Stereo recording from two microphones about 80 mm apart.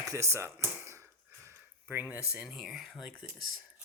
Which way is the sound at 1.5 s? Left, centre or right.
Right.